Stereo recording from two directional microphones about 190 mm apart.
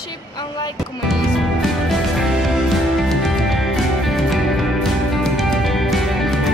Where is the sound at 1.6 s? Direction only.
Centre (ahead or behind).